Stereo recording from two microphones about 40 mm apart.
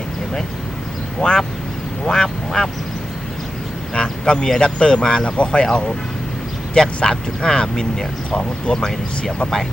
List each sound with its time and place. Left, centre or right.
1.2 s speech: centre
2.0 s quack: centre
3.9 s a sound: centre
4.8 s speech: left